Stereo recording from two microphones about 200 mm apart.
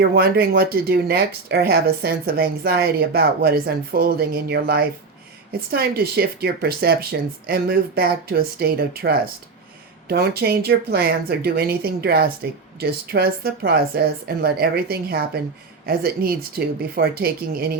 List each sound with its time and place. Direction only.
0.0 s speech: 50° right (ahead or behind)